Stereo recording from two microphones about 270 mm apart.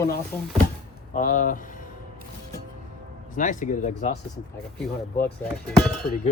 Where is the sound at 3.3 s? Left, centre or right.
Left.